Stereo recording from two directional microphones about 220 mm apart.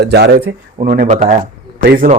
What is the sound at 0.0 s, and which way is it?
Speech, 50° right (ahead or behind).